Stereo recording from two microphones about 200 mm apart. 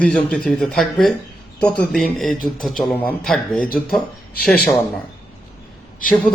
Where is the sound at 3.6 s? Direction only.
45° left (ahead or behind).